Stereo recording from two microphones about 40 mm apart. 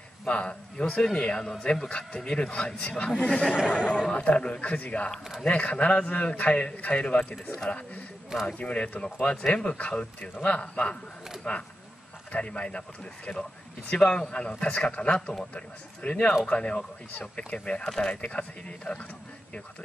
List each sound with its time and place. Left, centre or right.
0.3 s speech: left
2.6 s speech: left
9.0 s speech: left
17.8 s speech: centre
18.1 s speech: left